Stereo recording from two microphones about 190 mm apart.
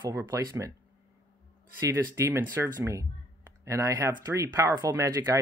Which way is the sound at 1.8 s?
15° right (ahead or behind).